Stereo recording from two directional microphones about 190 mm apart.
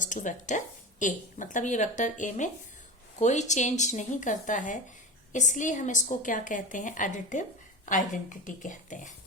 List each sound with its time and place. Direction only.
0.0 s a woman's voice: 40° left (ahead or behind)